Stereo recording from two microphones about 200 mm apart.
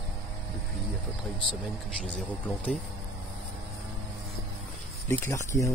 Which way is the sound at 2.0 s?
5° left (ahead or behind).